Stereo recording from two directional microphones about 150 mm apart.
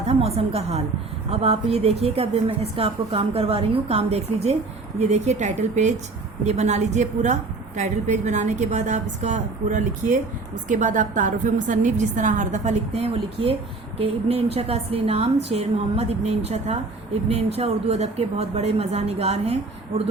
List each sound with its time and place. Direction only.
0.1 s a woman's voice: 45° right (ahead or behind)